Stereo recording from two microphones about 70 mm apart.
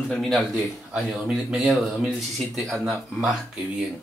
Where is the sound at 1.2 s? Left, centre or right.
Centre.